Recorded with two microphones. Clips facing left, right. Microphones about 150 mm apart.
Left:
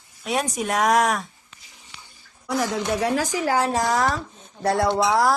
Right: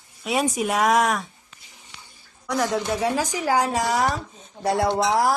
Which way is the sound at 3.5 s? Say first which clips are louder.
Even; 10° right (ahead or behind).